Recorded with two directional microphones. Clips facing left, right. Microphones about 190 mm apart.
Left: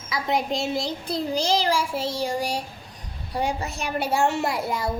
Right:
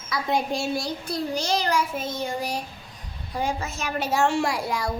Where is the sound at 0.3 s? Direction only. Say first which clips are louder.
Even; 20° left (ahead or behind).